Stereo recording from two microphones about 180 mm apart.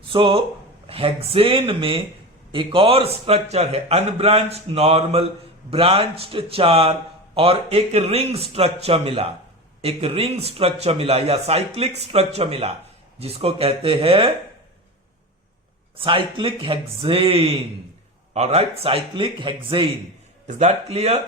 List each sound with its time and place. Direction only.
0.1 s a man's voice: 30° right (ahead or behind)
16.0 s a man's voice: 30° right (ahead or behind)